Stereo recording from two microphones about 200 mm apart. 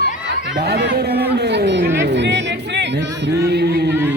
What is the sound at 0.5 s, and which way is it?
Speech, 50° right (ahead or behind).